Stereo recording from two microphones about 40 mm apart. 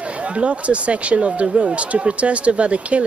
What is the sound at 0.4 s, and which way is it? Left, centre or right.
Speech, right.